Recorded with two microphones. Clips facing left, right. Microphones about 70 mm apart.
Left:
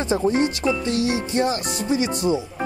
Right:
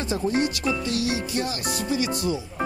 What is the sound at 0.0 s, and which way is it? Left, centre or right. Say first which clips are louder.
Speech: left 4 dB; left.